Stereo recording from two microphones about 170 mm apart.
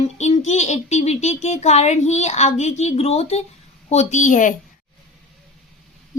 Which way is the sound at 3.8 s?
40° left (ahead or behind).